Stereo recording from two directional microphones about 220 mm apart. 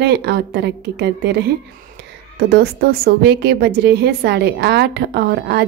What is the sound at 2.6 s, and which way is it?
Speech, 45° right (ahead or behind).